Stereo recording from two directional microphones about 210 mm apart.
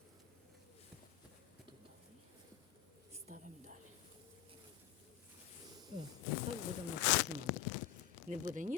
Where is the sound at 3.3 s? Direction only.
40° right (ahead or behind).